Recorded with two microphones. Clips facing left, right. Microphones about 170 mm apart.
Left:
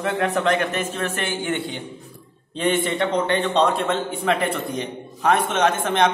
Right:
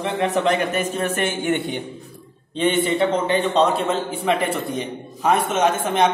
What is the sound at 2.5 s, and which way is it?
A man's voice, centre (ahead or behind).